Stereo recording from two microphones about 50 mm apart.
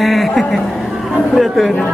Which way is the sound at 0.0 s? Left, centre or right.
Centre.